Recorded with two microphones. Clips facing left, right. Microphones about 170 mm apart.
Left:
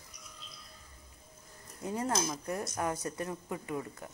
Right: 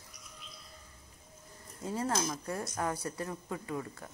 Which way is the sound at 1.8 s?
15° left (ahead or behind).